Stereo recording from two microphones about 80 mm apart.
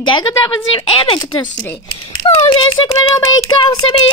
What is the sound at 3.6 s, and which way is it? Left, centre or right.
Speech, left.